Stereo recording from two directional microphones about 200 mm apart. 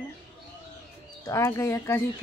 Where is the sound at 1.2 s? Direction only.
15° left (ahead or behind).